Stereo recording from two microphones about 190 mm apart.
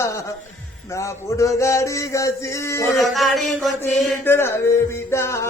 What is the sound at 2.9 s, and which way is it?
Chant, centre (ahead or behind).